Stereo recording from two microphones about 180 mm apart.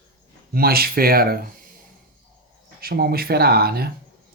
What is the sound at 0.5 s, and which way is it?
Speech, 55° right (ahead or behind).